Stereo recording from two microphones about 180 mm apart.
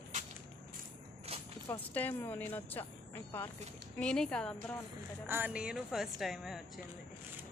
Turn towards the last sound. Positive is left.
turn(degrees=0)  # may be behind; listen again after turning